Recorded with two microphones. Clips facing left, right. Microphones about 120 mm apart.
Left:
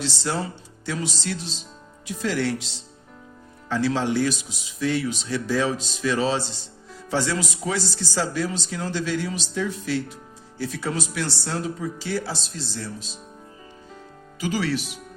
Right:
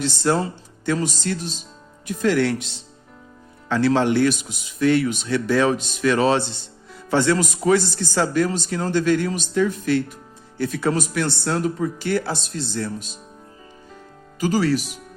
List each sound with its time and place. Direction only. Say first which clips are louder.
0.0 s speech: right 6 dB; 55° right (ahead or behind)
14.4 s speech: right 5 dB; 40° right (ahead or behind)